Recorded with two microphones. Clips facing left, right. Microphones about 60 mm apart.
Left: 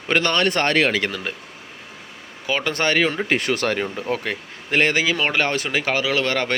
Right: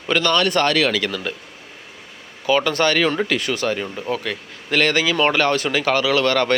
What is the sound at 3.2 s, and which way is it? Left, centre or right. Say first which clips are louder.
Speech: even; left.